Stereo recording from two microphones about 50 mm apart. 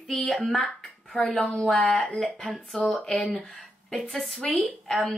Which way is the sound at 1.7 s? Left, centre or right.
Left.